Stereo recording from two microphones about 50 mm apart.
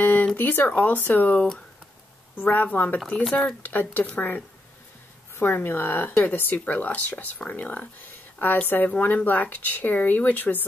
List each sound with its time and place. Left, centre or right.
0.0 s a sound: left
0.4 s speech: left
2.4 s speech: left
5.3 s speech: left